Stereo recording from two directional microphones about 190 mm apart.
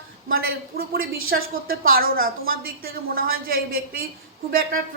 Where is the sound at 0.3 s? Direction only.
50° right (ahead or behind).